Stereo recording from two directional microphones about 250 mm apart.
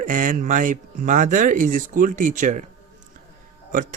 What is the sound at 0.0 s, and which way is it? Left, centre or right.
A man's voice, right.